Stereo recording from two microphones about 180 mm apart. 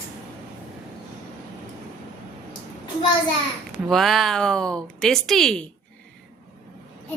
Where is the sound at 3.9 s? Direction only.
Centre (ahead or behind).